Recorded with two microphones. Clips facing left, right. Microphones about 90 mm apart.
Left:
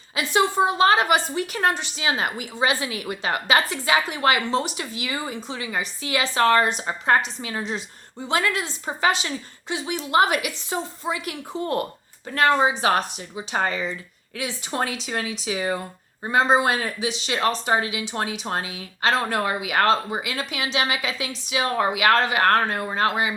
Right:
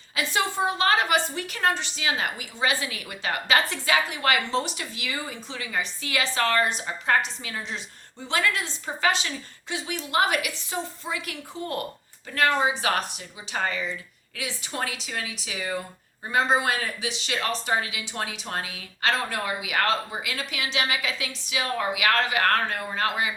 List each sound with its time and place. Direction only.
0.3 s a woman's voice: 20° left (ahead or behind)